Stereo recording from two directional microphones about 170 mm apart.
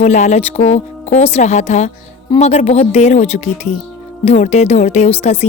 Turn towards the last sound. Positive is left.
turn(degrees=35)  # may be behind; listen again after turning